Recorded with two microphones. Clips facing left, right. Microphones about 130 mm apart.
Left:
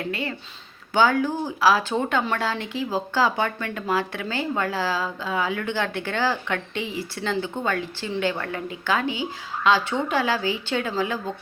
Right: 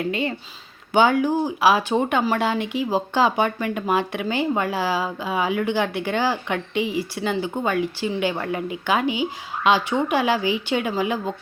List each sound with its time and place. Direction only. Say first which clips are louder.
0.1 s speech: right 4 dB; 20° right (ahead or behind)